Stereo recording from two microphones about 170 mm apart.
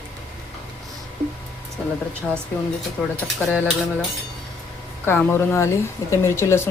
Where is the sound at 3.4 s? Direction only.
10° left (ahead or behind).